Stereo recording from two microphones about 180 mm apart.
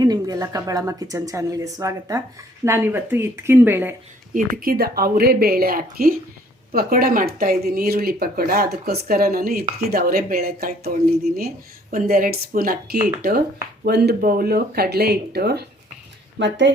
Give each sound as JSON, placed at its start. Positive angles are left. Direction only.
{"t": 0.0, "sound": "speech", "side_deg": -20}
{"t": 4.4, "sound": "speech", "side_deg": -55}
{"t": 13.8, "sound": "speech", "side_deg": -65}
{"t": 16.4, "sound": "speech", "side_deg": -85}